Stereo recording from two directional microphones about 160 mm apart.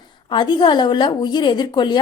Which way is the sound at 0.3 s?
30° left (ahead or behind).